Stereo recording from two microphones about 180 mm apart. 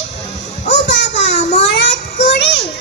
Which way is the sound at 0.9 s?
80° left.